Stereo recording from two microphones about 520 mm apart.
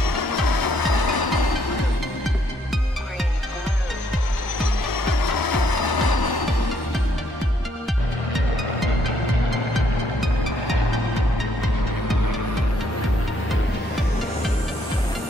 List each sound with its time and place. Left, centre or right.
0.0 s music: left
4.8 s music: left